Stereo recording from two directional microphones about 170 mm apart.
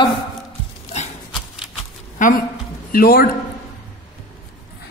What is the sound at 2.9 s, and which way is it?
Speech, 60° left (ahead or behind).